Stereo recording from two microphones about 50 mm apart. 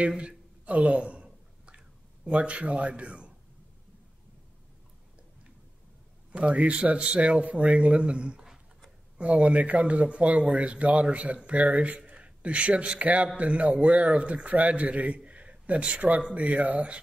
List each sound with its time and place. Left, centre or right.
0.2 s a sound: centre
2.2 s a man's voice: right
6.3 s a man's voice: right